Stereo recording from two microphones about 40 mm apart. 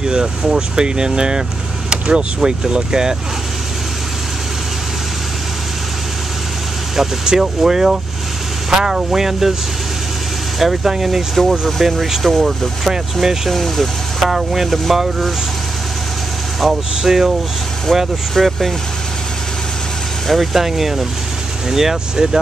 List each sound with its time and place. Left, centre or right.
0.0 s speech: centre
7.0 s speech: centre
10.6 s speech: centre
12.8 s speech: centre
16.6 s speech: centre
18.4 s speech: centre
20.2 s speech: centre